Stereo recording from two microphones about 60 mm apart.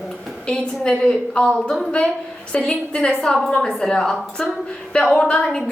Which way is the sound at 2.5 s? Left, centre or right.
Centre.